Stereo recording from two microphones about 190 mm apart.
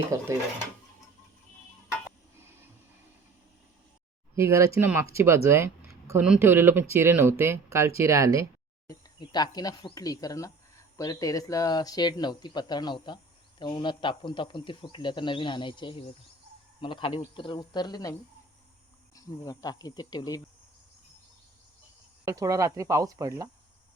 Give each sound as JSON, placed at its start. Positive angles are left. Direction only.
{"t": 0.1, "sound": "speech", "side_deg": -15}
{"t": 4.4, "sound": "speech", "side_deg": -15}
{"t": 8.9, "sound": "speech", "side_deg": 20}
{"t": 19.1, "sound": "speech", "side_deg": 20}
{"t": 22.2, "sound": "speech", "side_deg": -15}